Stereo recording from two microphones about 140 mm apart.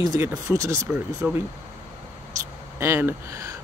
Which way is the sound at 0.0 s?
25° right (ahead or behind).